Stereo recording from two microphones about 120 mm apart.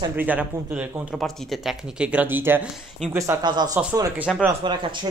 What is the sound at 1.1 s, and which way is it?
Speech, 5° left (ahead or behind).